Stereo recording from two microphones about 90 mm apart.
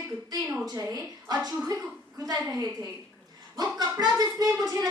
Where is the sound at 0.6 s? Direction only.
45° right (ahead or behind).